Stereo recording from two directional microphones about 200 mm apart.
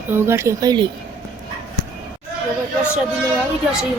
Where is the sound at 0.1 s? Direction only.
10° right (ahead or behind).